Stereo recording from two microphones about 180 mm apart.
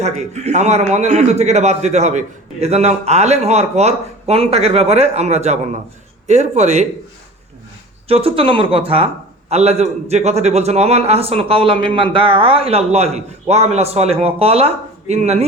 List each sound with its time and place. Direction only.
0.0 s a man's voice: 40° right (ahead or behind)
8.0 s a man's voice: 30° right (ahead or behind)